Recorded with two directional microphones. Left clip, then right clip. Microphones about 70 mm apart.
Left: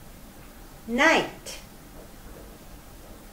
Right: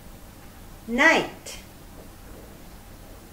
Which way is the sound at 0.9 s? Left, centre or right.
Right.